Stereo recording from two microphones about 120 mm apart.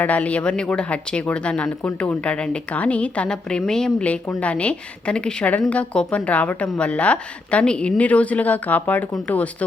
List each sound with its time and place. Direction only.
0.0 s a woman's voice: 10° left (ahead or behind)